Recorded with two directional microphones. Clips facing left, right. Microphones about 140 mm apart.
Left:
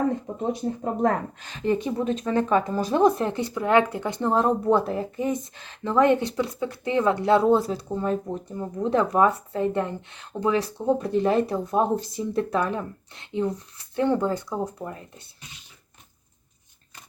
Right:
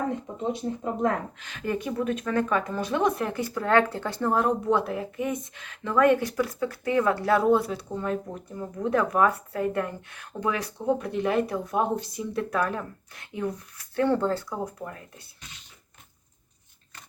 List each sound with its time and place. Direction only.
1.0 s speech: 35° left (ahead or behind); by 14.4 s 15° left (ahead or behind)
14.5 s speech: 25° left (ahead or behind)